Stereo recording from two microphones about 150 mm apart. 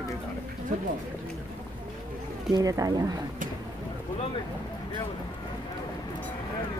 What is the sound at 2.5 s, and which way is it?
Speech, 25° right (ahead or behind).